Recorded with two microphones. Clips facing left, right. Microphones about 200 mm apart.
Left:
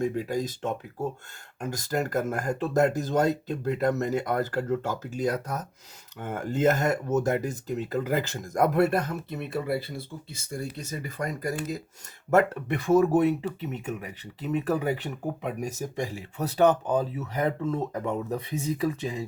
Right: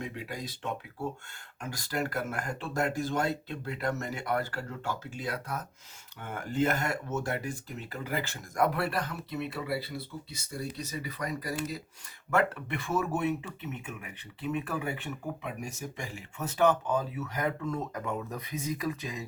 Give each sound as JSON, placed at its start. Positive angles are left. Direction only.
{"t": 0.0, "sound": "speech", "side_deg": 45}